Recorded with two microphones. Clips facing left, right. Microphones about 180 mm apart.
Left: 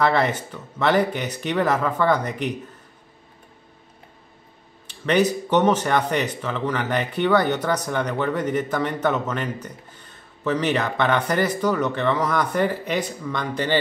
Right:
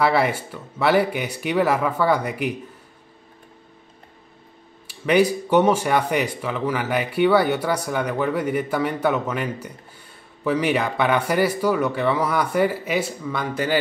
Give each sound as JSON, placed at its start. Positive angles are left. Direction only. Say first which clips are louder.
{"t": 0.0, "sound": "speech", "louder": "right 1 dB", "side_deg": -10}
{"t": 4.8, "sound": "speech", "louder": "right 2 dB", "side_deg": -10}